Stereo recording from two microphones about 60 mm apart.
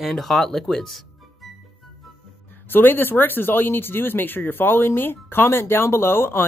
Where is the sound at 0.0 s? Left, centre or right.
Centre.